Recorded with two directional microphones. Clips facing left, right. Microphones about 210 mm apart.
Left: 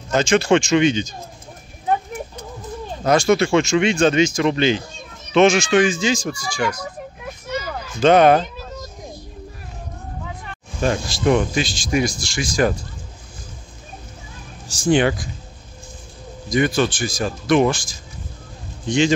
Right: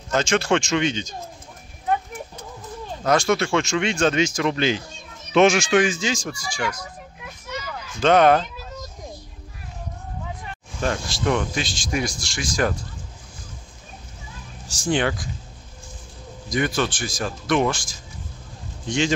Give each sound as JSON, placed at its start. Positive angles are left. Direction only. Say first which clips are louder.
{"t": 0.1, "sound": "speech", "louder": "left 4 dB", "side_deg": 0}
{"t": 3.1, "sound": "speech", "louder": "left 4 dB", "side_deg": 0}
{"t": 7.5, "sound": "a sound", "louder": "left 6 dB", "side_deg": 35}
{"t": 8.0, "sound": "speech", "louder": "left 3 dB", "side_deg": 5}
{"t": 10.8, "sound": "speech", "louder": "left 4 dB", "side_deg": 5}
{"t": 14.9, "sound": "speech", "louder": "left 6 dB", "side_deg": 10}
{"t": 16.4, "sound": "speech", "louder": "left 5 dB", "side_deg": 0}
{"t": 18.9, "sound": "speech", "louder": "left 5 dB", "side_deg": 0}